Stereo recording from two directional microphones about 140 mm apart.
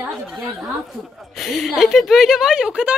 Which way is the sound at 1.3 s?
Centre (ahead or behind).